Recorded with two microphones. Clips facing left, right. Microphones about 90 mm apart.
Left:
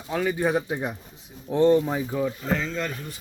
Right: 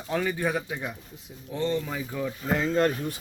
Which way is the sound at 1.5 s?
55° left (ahead or behind).